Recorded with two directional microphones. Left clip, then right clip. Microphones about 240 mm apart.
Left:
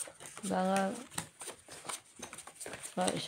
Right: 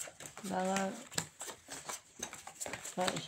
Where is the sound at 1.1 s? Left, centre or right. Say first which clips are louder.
Right 2 dB; centre.